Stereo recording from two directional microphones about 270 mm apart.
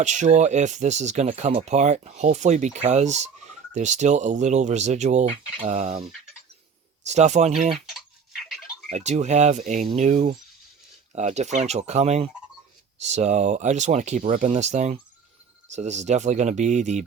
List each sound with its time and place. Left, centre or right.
0.0 s speech: right
7.9 s a sound: centre
8.9 s speech: right